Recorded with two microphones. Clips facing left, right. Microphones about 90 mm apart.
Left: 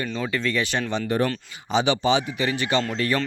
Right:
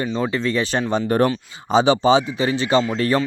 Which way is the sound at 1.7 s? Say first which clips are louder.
Right 6 dB; 35° right (ahead or behind).